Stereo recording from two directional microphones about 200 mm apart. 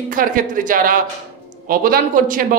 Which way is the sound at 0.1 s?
40° right (ahead or behind).